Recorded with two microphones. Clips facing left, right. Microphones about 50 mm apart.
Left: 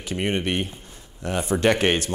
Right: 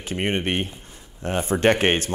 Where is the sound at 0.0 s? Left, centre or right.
Right.